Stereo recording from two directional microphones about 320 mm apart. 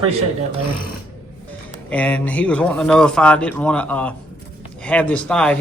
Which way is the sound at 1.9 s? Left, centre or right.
Centre.